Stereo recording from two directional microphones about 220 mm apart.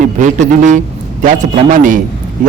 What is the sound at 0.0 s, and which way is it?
A man's voice, 35° right (ahead or behind).